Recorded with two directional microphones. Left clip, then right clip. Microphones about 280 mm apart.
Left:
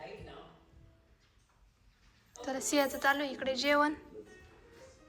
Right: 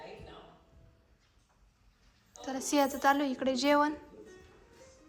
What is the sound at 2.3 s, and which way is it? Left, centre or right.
A woman's voice, centre.